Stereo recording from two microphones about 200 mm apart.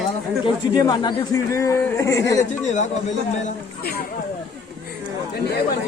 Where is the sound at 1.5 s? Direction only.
15° left (ahead or behind).